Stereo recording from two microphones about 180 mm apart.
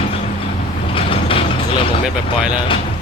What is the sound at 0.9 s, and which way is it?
Vehicle, 30° left (ahead or behind).